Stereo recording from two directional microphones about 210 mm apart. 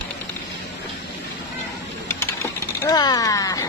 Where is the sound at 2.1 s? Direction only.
15° left (ahead or behind).